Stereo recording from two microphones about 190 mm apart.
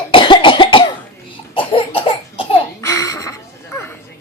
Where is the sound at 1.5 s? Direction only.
30° left (ahead or behind).